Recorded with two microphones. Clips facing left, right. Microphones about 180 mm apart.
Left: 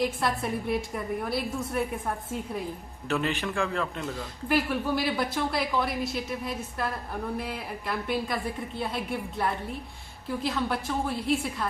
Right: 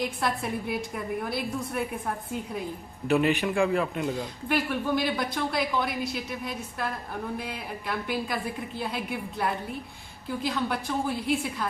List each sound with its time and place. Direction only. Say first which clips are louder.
0.0 s a woman's voice: left 1 dB; centre (ahead or behind)
3.1 s a man's voice: right 5 dB; 15° right (ahead or behind)
4.4 s a woman's voice: left 1 dB; centre (ahead or behind)